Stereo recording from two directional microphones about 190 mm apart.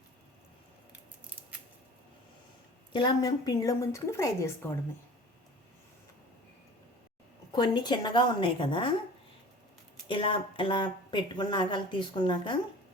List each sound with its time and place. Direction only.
2.9 s a woman's voice: 20° left (ahead or behind)
7.5 s a woman's voice: 25° left (ahead or behind)
10.1 s a woman's voice: 25° left (ahead or behind)